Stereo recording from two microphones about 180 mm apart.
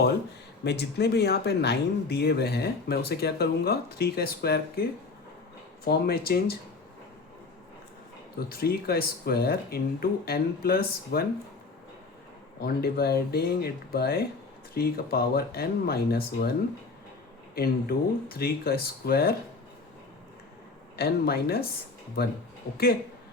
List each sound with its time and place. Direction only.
0.6 s speech: 65° left (ahead or behind)
8.4 s speech: 55° left (ahead or behind)
12.5 s speech: 60° left (ahead or behind)
17.5 s speech: 55° left (ahead or behind)
20.9 s speech: 60° left (ahead or behind)